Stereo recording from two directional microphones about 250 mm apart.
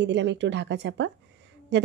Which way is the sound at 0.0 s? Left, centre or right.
Right.